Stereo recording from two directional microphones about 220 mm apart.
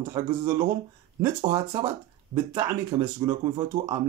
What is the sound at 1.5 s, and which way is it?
A man's voice, 10° right (ahead or behind).